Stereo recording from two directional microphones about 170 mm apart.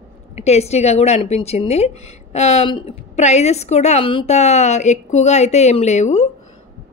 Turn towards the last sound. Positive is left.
turn(degrees=45)  # may be behind; listen again after turning